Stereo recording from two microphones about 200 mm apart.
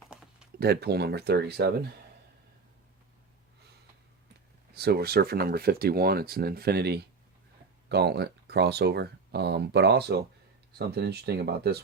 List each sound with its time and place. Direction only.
0.1 s a sound: 5° right (ahead or behind)
0.6 s speech: 50° right (ahead or behind)
4.7 s speech: 50° right (ahead or behind)